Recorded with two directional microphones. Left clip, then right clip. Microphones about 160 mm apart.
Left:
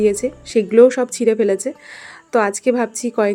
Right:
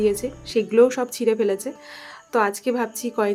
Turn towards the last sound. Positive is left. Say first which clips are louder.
# left 5 dB
turn(degrees=30)  # may be behind; listen again after turning